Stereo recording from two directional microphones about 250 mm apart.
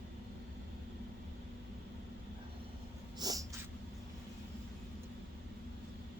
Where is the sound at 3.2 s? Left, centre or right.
Centre.